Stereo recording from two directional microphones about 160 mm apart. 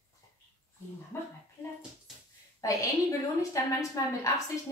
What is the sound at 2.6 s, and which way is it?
A woman's voice, 20° left (ahead or behind).